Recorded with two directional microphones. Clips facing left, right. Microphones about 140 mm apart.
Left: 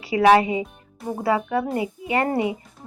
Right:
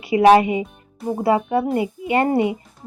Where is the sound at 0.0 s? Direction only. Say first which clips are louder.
Right 3 dB; 25° right (ahead or behind).